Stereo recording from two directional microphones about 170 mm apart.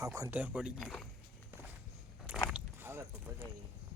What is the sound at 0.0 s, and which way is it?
Speech, 20° right (ahead or behind).